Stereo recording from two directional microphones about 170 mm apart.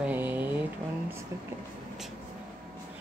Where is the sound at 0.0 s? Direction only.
10° right (ahead or behind).